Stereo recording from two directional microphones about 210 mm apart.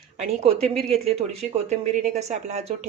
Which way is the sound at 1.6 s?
35° right (ahead or behind).